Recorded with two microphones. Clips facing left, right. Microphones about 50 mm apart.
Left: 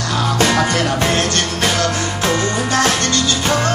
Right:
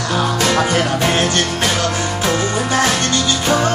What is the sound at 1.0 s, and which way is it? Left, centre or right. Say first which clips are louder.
Music: right 1 dB; centre.